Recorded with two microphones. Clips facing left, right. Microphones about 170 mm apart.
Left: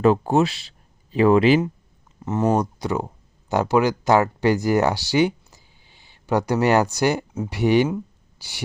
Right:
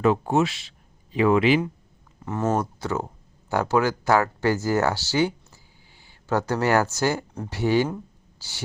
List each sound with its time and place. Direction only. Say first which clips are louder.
0.0 s speech: left 3 dB; 35° left (ahead or behind)
2.2 s speech: left 4 dB; 20° left (ahead or behind)